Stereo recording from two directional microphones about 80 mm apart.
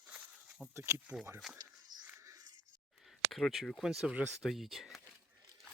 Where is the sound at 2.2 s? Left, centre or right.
Right.